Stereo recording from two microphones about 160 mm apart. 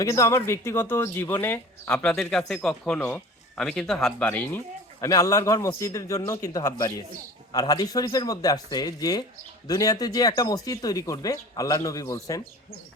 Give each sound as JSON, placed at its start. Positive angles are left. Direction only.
{"t": 0.0, "sound": "speech", "side_deg": 20}